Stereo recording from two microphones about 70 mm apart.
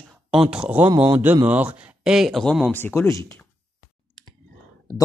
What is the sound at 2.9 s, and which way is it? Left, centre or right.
Speech, left.